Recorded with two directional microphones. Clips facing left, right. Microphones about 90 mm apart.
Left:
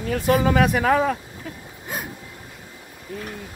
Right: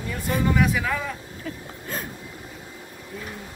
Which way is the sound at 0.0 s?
70° left (ahead or behind).